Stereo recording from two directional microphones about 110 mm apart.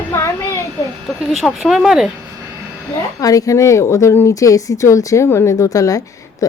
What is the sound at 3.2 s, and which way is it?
Speech, 30° left (ahead or behind).